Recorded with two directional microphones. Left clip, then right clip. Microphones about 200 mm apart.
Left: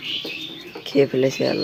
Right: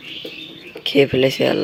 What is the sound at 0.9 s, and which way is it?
Speech, 10° right (ahead or behind).